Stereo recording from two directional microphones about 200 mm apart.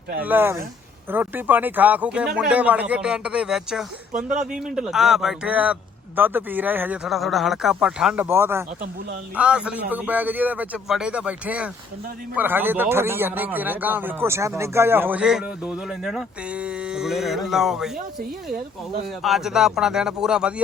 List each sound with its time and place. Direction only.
0.2 s a man's voice: 10° right (ahead or behind)
19.0 s a man's voice: centre (ahead or behind)